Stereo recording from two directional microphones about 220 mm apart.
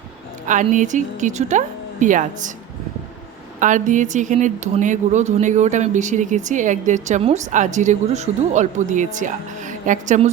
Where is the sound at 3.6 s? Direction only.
35° right (ahead or behind).